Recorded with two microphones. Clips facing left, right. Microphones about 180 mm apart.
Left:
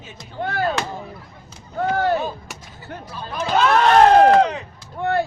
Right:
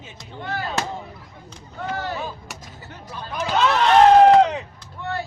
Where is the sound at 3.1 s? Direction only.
20° right (ahead or behind).